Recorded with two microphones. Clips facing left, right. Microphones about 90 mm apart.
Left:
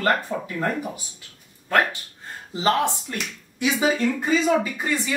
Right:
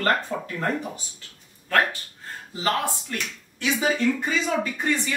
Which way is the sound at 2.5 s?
20° left (ahead or behind).